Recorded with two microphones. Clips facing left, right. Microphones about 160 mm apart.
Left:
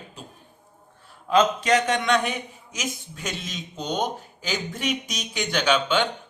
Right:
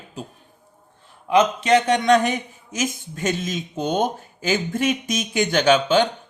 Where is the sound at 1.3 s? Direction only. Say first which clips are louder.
Right 2 dB; 15° right (ahead or behind).